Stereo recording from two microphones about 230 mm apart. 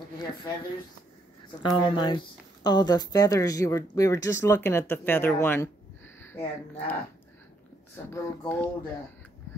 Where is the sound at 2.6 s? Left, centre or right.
Centre.